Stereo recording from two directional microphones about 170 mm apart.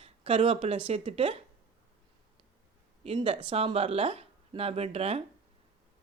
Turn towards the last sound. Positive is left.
turn(degrees=-35)  # may be behind; listen again after turning